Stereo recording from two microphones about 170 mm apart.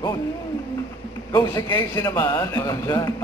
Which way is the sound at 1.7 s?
20° left (ahead or behind).